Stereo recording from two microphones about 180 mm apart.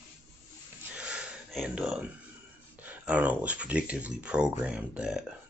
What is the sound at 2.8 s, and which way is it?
Speech, 10° right (ahead or behind).